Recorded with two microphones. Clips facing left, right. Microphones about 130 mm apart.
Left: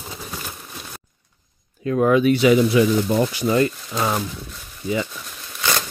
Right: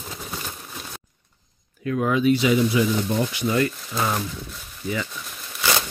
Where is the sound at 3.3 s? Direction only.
30° left (ahead or behind).